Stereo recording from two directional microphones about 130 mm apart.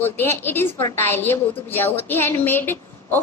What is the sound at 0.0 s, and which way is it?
A woman's voice, 15° left (ahead or behind).